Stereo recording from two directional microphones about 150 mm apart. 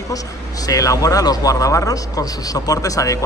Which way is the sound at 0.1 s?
25° left (ahead or behind).